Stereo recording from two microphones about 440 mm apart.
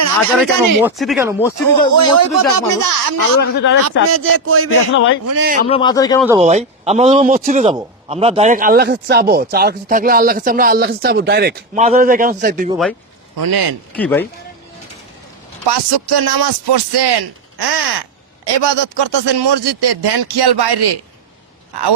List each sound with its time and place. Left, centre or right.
0.3 s speech: centre
2.0 s speech: right
3.5 s speech: left
3.8 s speech: right
5.4 s speech: centre
5.6 s a man's voice: centre
6.2 s a man's voice: centre
13.3 s a man's voice: right
13.9 s speech: centre
15.6 s speech: right